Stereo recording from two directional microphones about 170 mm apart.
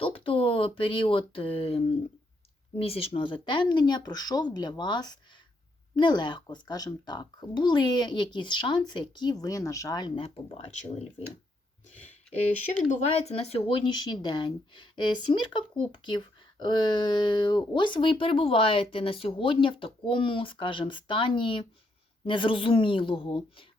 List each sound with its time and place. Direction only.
0.0 s speech: 30° left (ahead or behind)
12.9 s a woman's voice: 40° left (ahead or behind)